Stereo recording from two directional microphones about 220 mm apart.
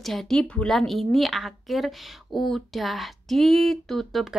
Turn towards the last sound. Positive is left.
turn(degrees=0)  # may be behind; listen again after turning